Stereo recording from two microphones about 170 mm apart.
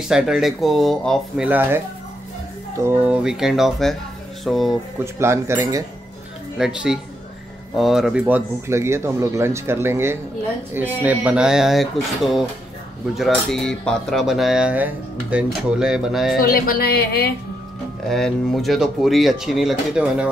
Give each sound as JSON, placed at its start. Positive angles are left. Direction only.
{"t": 0.1, "sound": "cutlery", "side_deg": -5}
{"t": 1.4, "sound": "speech", "side_deg": -10}
{"t": 2.8, "sound": "cutlery", "side_deg": -10}
{"t": 5.0, "sound": "speech", "side_deg": -15}
{"t": 6.6, "sound": "cutlery", "side_deg": -5}
{"t": 7.7, "sound": "speech", "side_deg": 0}
{"t": 10.7, "sound": "cutlery", "side_deg": -10}
{"t": 16.3, "sound": "speech", "side_deg": 60}
{"t": 18.0, "sound": "cutlery", "side_deg": 0}